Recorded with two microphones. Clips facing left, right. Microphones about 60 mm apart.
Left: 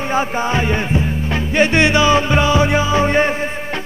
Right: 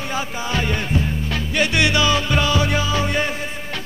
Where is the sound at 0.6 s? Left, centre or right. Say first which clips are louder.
Left 4 dB; left.